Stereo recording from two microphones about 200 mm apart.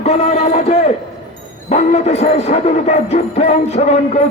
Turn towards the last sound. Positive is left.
turn(degrees=35)  # may be behind; listen again after turning